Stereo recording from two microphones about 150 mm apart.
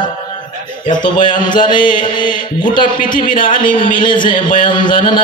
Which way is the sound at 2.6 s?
30° left (ahead or behind).